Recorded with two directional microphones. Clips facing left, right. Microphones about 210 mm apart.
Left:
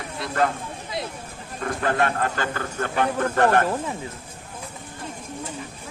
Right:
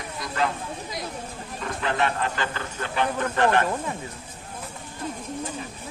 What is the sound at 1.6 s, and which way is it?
A man's voice, 50° left (ahead or behind).